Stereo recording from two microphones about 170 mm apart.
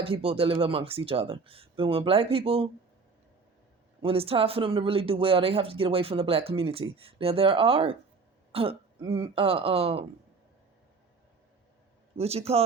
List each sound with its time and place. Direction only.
0.0 s speech: 35° right (ahead or behind)
4.0 s speech: 35° right (ahead or behind)
12.1 s speech: 35° right (ahead or behind)